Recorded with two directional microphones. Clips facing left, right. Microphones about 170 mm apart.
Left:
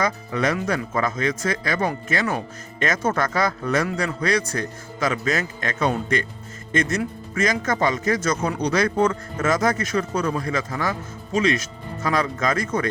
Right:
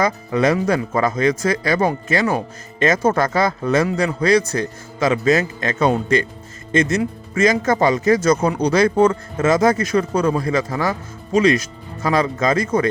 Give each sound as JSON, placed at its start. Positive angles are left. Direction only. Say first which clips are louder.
{"t": 0.0, "sound": "speech", "louder": "right 5 dB", "side_deg": -30}